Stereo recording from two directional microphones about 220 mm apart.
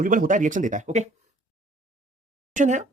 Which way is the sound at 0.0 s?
40° right (ahead or behind).